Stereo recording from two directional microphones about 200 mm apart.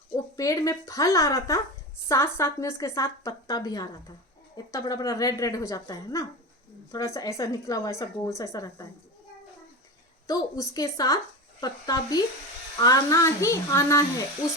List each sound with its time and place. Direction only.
0.3 s a woman's voice: 15° left (ahead or behind)
10.2 s a woman's voice: 15° left (ahead or behind)